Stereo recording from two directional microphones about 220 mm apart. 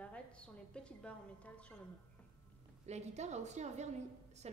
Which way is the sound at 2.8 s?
30° right (ahead or behind).